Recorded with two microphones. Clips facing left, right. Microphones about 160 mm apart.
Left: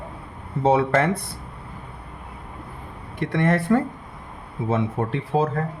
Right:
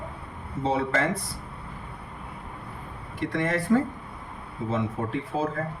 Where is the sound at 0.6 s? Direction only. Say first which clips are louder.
Left 7 dB; 60° left (ahead or behind).